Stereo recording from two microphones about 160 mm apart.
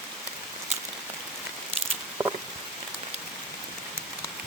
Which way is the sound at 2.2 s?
25° right (ahead or behind).